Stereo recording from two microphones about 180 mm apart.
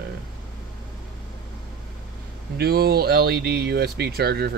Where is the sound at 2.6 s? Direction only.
60° right (ahead or behind).